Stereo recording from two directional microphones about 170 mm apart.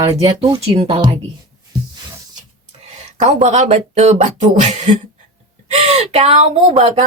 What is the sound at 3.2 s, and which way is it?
Speech, 45° right (ahead or behind).